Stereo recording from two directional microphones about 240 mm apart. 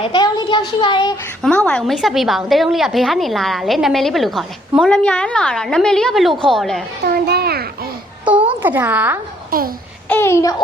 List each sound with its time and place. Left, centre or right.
0.0 s a child's voice: centre
1.4 s a woman's voice: centre
7.0 s a child's voice: right
8.2 s a sound: centre
9.5 s speech: right
10.1 s babbling: centre